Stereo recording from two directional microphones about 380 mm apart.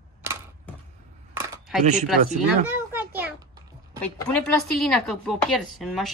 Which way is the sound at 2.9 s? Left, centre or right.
Centre.